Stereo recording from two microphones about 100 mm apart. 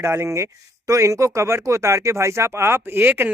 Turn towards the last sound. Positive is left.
turn(degrees=-20)  # may be behind; listen again after turning